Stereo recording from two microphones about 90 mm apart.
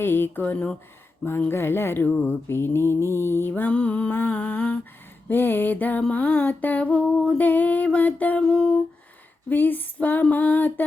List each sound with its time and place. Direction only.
0.0 s mantra: 25° left (ahead or behind)
1.2 s mantra: 25° left (ahead or behind)
3.2 s music: 25° left (ahead or behind); by 8.8 s 10° left (ahead or behind)
9.5 s mantra: 20° left (ahead or behind)